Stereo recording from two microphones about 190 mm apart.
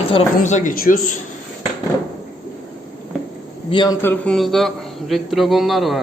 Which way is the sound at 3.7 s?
25° left (ahead or behind).